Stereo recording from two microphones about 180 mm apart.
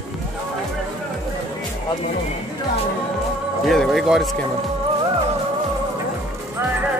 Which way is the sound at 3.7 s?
Centre (ahead or behind).